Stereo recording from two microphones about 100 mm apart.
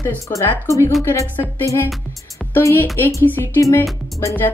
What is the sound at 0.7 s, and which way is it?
Speech, 30° left (ahead or behind).